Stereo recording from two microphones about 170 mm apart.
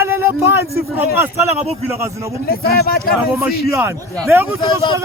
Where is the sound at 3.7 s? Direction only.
10° right (ahead or behind).